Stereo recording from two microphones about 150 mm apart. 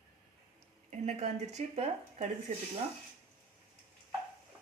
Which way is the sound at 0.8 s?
50° right (ahead or behind).